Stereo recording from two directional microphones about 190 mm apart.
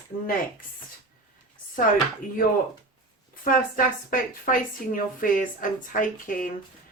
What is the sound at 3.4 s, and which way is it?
Speech, 45° left (ahead or behind).